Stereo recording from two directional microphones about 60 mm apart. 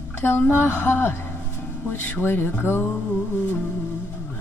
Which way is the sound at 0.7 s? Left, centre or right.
Left.